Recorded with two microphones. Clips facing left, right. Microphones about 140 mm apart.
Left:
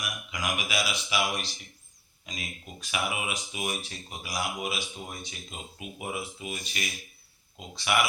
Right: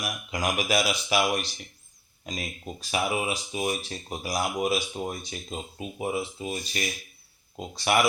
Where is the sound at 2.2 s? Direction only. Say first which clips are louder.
Right 6 dB; 35° right (ahead or behind).